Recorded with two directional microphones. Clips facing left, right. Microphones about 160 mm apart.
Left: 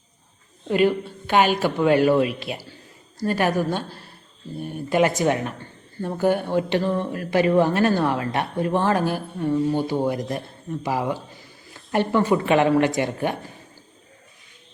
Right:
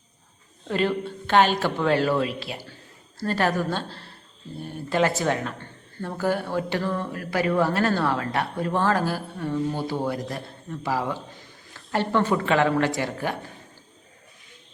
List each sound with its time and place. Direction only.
0.7 s a woman's voice: 10° left (ahead or behind)